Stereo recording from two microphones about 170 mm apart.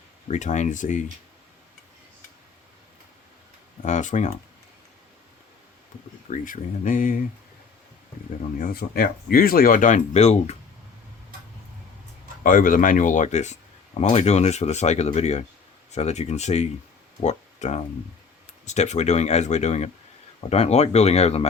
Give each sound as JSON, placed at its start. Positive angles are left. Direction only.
{"t": 0.3, "sound": "speech", "side_deg": 45}
{"t": 3.8, "sound": "speech", "side_deg": 45}
{"t": 6.3, "sound": "speech", "side_deg": 50}
{"t": 8.5, "sound": "speech", "side_deg": 65}
{"t": 12.4, "sound": "speech", "side_deg": 55}
{"t": 17.2, "sound": "a sound", "side_deg": 45}
{"t": 18.6, "sound": "speech", "side_deg": 40}